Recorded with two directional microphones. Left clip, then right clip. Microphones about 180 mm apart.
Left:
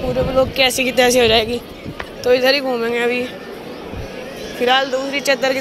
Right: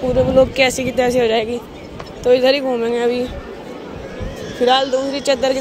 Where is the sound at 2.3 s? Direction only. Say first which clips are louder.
Right 1 dB; 30° right (ahead or behind).